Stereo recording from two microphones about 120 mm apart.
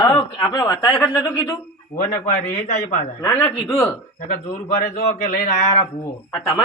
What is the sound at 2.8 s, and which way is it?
Speech, 25° left (ahead or behind).